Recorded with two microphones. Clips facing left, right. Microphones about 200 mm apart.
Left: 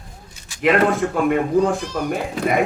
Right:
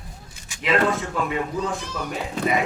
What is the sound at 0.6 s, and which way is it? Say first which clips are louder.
Speech: left 5 dB; 55° left (ahead or behind).